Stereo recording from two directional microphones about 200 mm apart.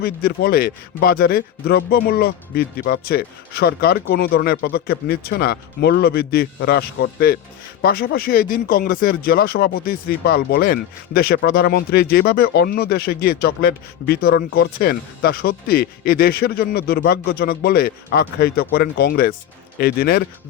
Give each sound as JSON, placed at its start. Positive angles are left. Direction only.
{"t": 0.0, "sound": "speech", "side_deg": 50}